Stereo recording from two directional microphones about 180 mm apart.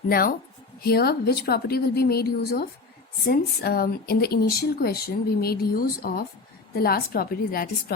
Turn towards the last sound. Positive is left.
turn(degrees=55)  # may be behind; listen again after turning